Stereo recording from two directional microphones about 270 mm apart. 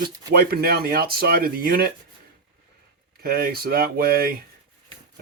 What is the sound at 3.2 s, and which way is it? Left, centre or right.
Speech, right.